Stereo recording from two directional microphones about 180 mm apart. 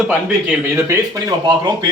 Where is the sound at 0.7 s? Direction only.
15° right (ahead or behind).